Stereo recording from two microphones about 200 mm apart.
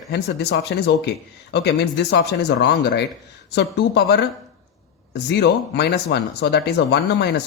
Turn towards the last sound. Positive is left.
turn(degrees=55)  # may be behind; listen again after turning